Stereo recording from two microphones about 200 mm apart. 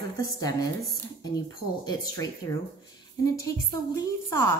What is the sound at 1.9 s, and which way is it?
A woman's voice, 20° left (ahead or behind).